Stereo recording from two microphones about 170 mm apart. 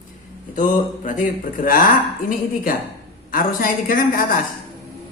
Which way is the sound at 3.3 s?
55° left (ahead or behind).